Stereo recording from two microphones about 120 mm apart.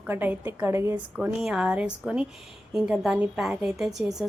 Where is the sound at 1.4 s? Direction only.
5° right (ahead or behind).